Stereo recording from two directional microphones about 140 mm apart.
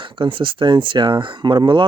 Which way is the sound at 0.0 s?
35° right (ahead or behind).